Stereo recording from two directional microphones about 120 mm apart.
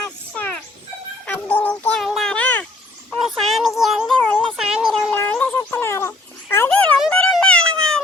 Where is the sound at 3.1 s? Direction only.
Centre (ahead or behind).